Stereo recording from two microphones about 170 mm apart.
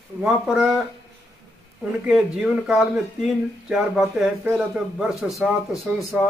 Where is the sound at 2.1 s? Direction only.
5° right (ahead or behind).